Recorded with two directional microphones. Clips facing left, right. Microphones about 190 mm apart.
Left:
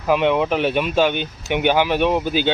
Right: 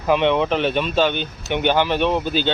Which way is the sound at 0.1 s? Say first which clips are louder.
Even; 5° left (ahead or behind).